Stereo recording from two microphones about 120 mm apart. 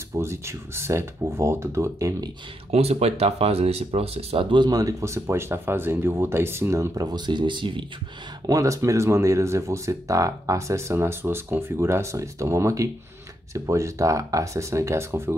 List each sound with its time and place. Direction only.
0.1 s speech: 20° right (ahead or behind)
2.7 s speech: 60° right (ahead or behind); by 7.8 s 40° right (ahead or behind)
8.5 s speech: 30° right (ahead or behind)